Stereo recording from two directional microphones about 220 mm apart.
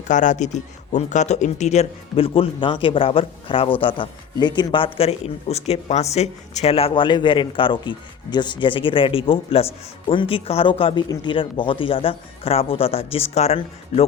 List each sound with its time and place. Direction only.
0.1 s speech: 35° left (ahead or behind)